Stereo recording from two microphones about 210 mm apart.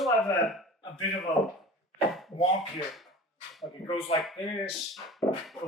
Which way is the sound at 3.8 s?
25° left (ahead or behind).